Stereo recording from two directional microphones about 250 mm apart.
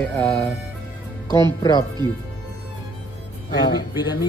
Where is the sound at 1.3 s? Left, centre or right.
Centre.